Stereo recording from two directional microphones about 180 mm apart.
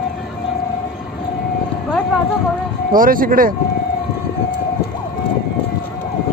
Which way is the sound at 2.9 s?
50° right (ahead or behind).